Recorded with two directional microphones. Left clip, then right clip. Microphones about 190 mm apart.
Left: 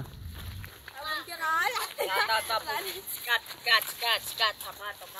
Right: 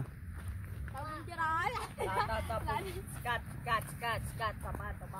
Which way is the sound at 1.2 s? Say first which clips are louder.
Left 5 dB; 55° left (ahead or behind).